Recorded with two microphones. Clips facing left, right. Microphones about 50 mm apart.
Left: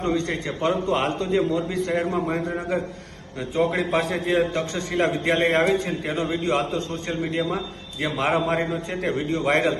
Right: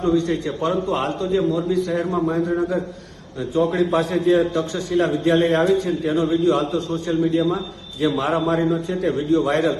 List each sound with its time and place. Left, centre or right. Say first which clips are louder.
0.0 s a man's voice: right 5 dB; left
3.5 s a man's voice: right 3 dB; left